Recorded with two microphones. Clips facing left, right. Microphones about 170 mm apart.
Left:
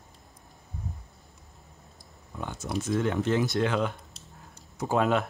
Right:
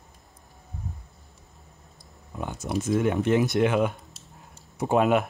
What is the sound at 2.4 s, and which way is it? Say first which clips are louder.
Speech: right 3 dB; 15° right (ahead or behind).